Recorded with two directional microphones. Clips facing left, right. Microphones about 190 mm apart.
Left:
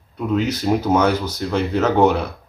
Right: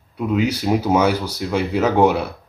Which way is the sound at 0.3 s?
10° right (ahead or behind).